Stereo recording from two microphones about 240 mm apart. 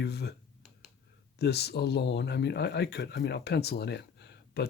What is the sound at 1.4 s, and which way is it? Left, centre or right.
Speech, left.